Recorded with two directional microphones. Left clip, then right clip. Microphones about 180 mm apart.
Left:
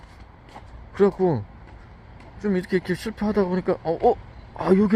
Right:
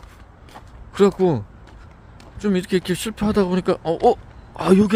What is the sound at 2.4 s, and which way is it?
Speech, 25° right (ahead or behind).